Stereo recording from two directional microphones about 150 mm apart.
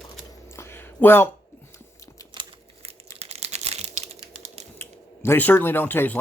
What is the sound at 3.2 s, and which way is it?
Typing, 45° right (ahead or behind).